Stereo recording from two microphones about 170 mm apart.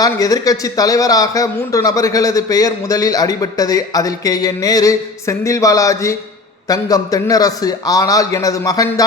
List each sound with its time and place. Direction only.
0.0 s speech: 20° left (ahead or behind)